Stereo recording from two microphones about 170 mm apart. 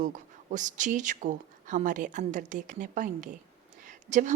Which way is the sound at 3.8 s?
50° right (ahead or behind).